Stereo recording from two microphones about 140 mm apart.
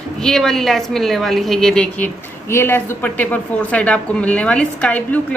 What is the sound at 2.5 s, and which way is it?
A woman's voice, 15° left (ahead or behind).